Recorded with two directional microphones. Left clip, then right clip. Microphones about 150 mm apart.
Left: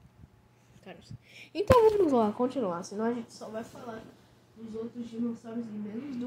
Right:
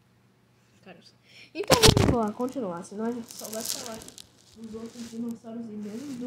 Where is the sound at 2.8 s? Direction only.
Centre (ahead or behind).